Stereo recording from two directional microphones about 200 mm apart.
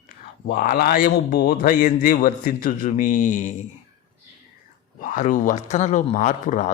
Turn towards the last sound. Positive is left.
turn(degrees=40)  # may be behind; listen again after turning